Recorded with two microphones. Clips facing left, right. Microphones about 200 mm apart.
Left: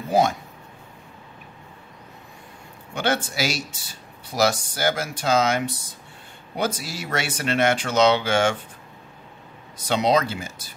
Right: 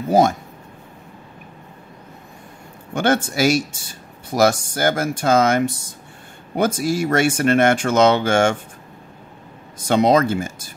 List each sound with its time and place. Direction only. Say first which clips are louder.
0.1 s speech: right 4 dB; 45° right (ahead or behind)
2.9 s speech: right 6 dB; 50° right (ahead or behind)
9.8 s speech: right 5 dB; 50° right (ahead or behind)